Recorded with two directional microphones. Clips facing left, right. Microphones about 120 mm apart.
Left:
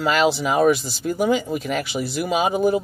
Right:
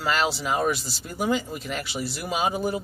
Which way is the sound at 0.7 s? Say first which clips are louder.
Left 9 dB; 50° left (ahead or behind).